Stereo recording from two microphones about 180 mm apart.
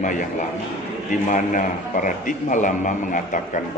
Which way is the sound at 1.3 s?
45° left (ahead or behind).